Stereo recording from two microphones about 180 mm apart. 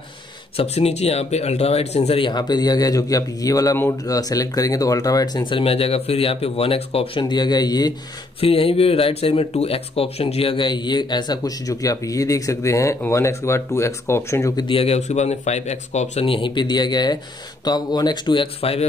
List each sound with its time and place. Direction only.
0.6 s speech: 35° left (ahead or behind)